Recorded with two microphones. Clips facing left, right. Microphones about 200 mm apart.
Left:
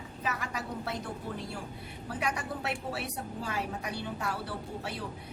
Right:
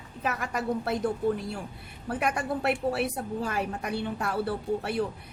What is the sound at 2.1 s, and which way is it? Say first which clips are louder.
A woman's voice: right 6 dB; 55° right (ahead or behind).